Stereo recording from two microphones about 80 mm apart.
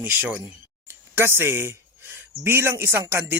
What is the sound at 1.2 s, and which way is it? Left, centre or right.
Speech, right.